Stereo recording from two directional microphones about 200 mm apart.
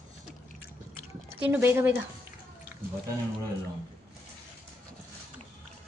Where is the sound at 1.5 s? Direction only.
10° right (ahead or behind).